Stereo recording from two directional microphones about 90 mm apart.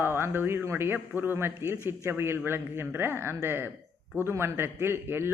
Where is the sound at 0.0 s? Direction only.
25° right (ahead or behind).